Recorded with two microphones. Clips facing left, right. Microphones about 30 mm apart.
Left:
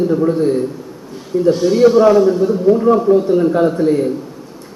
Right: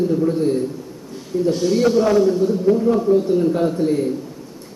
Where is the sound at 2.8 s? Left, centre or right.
Left.